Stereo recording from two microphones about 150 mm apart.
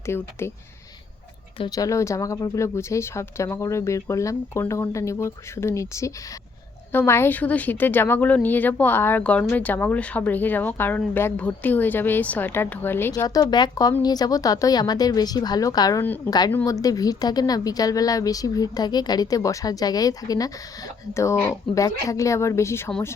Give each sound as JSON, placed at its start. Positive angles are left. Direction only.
{"t": 0.0, "sound": "a woman's voice", "side_deg": 15}
{"t": 1.5, "sound": "a woman's voice", "side_deg": 30}
{"t": 13.2, "sound": "a woman's voice", "side_deg": 25}